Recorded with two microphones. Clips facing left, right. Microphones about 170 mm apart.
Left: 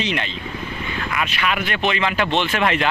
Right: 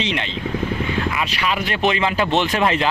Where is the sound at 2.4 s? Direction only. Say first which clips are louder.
Right 1 dB; 30° right (ahead or behind).